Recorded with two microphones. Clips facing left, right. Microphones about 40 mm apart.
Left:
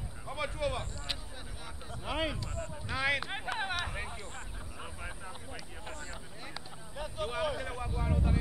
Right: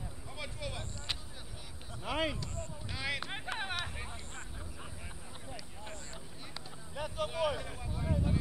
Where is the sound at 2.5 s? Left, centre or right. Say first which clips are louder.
Left 6 dB; left.